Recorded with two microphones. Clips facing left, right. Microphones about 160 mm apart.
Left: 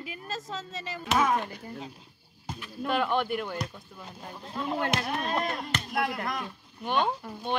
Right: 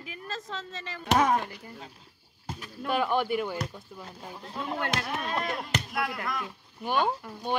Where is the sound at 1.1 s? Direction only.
35° right (ahead or behind).